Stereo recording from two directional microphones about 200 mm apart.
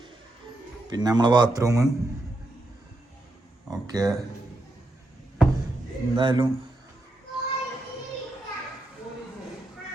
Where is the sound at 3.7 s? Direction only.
20° right (ahead or behind).